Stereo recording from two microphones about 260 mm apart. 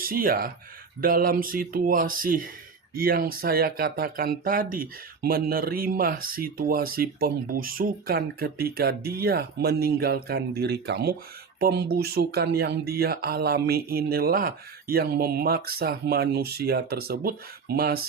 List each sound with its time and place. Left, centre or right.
0.0 s speech: right